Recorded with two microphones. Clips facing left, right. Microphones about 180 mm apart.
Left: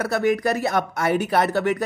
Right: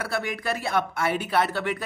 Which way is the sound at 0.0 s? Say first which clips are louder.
Left 8 dB; 45° left (ahead or behind).